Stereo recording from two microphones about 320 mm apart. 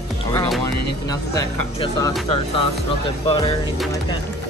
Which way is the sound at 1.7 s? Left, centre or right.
Centre.